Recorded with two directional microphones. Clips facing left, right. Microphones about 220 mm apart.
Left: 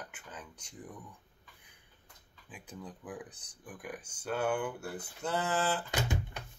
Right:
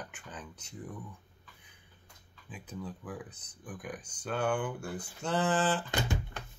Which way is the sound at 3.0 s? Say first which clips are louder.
Right 1 dB; 15° left (ahead or behind).